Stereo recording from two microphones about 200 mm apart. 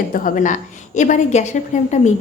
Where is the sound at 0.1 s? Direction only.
40° left (ahead or behind).